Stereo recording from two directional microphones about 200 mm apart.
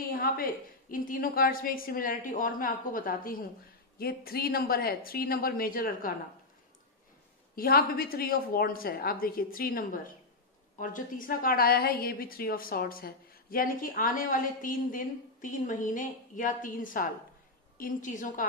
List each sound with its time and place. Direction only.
0.1 s a woman's voice: 45° left (ahead or behind)
7.5 s a woman's voice: 45° left (ahead or behind)